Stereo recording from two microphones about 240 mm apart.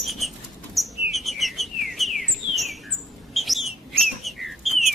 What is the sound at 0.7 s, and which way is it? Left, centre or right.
Bird, centre.